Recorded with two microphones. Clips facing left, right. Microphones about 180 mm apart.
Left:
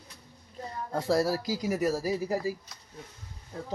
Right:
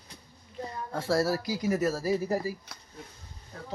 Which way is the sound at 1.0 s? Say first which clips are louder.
Left 1 dB; 20° left (ahead or behind).